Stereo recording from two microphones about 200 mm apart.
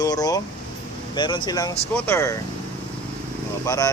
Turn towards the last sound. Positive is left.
turn(degrees=15)  # may be behind; listen again after turning